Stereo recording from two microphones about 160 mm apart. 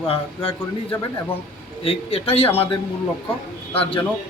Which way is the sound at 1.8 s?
35° left (ahead or behind).